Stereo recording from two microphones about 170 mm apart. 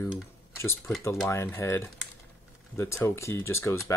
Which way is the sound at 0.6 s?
15° left (ahead or behind).